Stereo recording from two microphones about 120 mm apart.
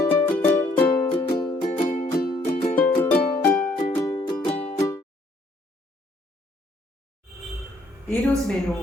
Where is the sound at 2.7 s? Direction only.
15° left (ahead or behind).